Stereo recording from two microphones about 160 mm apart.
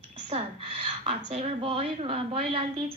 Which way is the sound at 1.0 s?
40° right (ahead or behind).